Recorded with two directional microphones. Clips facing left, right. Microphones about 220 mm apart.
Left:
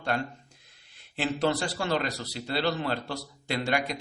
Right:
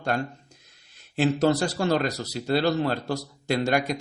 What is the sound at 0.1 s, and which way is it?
Speech, 45° right (ahead or behind).